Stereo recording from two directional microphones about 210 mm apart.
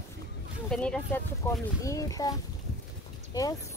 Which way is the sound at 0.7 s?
5° left (ahead or behind).